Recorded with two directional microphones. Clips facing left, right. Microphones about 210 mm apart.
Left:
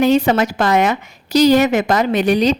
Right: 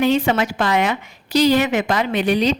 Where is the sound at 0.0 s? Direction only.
40° left (ahead or behind).